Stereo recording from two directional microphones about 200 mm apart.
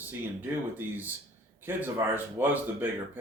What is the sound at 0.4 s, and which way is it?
Speech, 10° right (ahead or behind).